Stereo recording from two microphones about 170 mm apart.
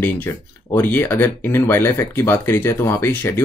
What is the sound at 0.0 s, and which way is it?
Speech, 15° left (ahead or behind).